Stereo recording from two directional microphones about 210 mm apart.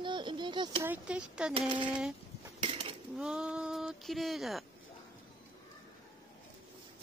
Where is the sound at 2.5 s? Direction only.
25° right (ahead or behind).